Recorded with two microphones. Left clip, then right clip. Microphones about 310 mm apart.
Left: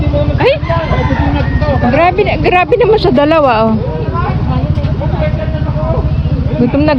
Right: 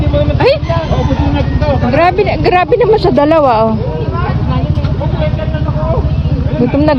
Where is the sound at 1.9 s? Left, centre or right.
Right.